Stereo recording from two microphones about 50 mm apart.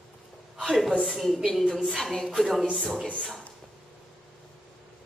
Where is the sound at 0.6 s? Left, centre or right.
Centre.